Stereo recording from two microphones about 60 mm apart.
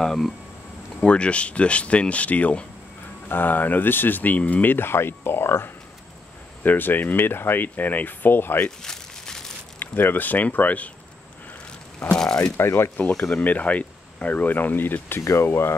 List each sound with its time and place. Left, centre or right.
0.0 s speech: centre
1.0 s speech: centre; by 5.7 s left
6.6 s speech: left
8.5 s a sound: centre
9.8 s speech: left
12.1 s mechanisms: centre
12.5 s speech: left
13.2 s speech: left
15.2 s speech: left